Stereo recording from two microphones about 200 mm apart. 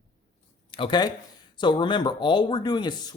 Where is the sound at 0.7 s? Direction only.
25° left (ahead or behind).